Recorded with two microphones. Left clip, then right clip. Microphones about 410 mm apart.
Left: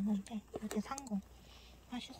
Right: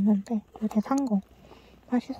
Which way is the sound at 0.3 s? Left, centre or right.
Right.